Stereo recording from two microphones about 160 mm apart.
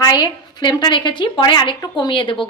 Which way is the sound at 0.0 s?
25° left (ahead or behind).